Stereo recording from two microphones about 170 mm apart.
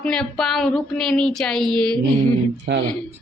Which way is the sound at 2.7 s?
90° right.